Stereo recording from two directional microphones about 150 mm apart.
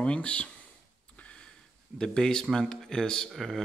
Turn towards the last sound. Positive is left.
turn(degrees=0)  # may be behind; listen again after turning